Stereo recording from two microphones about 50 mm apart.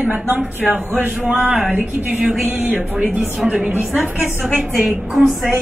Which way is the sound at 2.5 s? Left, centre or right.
Right.